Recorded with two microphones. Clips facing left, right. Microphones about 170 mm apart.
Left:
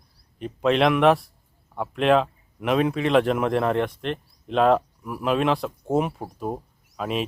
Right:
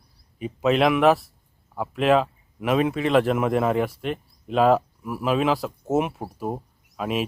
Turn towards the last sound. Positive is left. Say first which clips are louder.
# right 1 dB
turn(degrees=0)  # may be behind; listen again after turning